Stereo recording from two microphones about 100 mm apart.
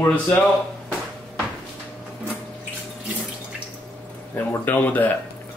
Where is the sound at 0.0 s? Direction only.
20° left (ahead or behind).